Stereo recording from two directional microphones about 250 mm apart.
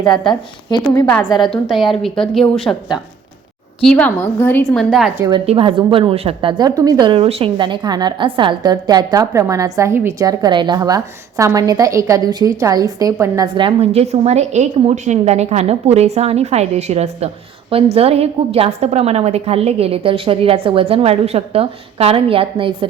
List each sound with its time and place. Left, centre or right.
0.0 s a woman's voice: centre
1.5 s a woman's voice: centre
5.1 s a woman's voice: centre